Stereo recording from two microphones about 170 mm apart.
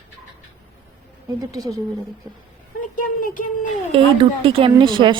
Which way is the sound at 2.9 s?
55° left (ahead or behind).